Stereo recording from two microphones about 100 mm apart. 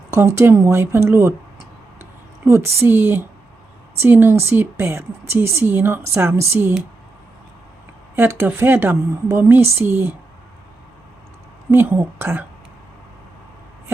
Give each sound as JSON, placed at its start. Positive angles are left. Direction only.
{"t": 0.1, "sound": "a woman's voice", "side_deg": -30}
{"t": 8.1, "sound": "a woman's voice", "side_deg": -20}
{"t": 11.7, "sound": "a woman's voice", "side_deg": -20}